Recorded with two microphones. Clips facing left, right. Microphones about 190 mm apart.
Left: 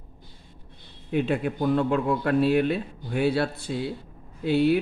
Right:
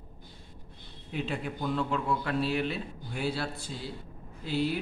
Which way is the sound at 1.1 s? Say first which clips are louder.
Left 9 dB; 60° left (ahead or behind).